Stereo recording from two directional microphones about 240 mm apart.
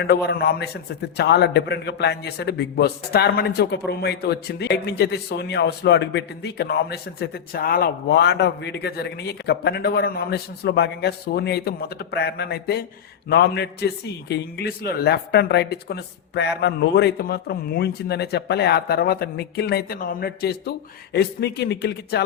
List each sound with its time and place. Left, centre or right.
0.0 s a man's voice: left